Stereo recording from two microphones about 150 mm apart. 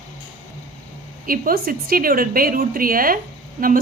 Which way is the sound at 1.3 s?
75° right (ahead or behind).